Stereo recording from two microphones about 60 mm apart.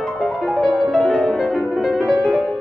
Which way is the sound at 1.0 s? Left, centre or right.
Centre.